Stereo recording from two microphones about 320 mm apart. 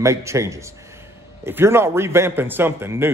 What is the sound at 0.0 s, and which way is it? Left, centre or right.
Speech, centre.